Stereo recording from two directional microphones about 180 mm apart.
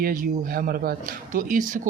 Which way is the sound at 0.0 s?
50° right (ahead or behind).